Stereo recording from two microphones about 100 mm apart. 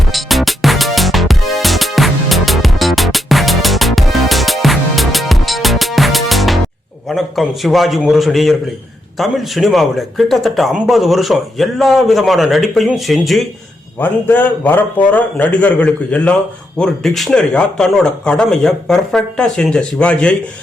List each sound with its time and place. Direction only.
0.1 s music: centre (ahead or behind)
7.1 s a man's voice: centre (ahead or behind)
14.0 s speech: 20° left (ahead or behind)